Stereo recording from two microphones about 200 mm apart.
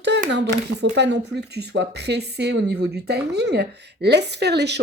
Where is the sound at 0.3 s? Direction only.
60° right (ahead or behind).